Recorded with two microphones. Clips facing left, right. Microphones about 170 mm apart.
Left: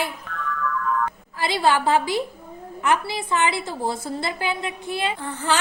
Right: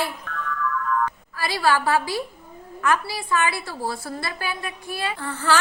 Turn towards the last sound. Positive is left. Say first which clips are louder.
# even
turn(degrees=20)  # may be behind; listen again after turning